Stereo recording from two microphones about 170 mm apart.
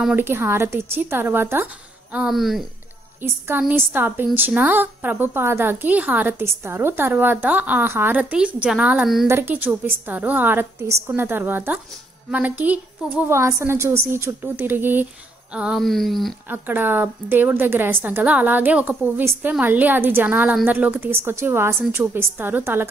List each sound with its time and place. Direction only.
0.0 s a woman's voice: 10° right (ahead or behind)
2.1 s speech: centre (ahead or behind)
3.2 s a woman's voice: 10° right (ahead or behind)
16.4 s a woman's voice: 10° right (ahead or behind)